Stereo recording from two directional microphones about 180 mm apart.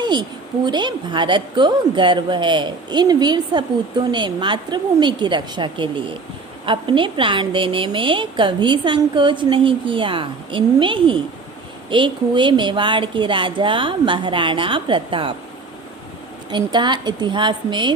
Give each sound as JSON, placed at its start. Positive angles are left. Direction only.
{"t": 0.0, "sound": "a woman's voice", "side_deg": -25}
{"t": 16.5, "sound": "a woman's voice", "side_deg": -25}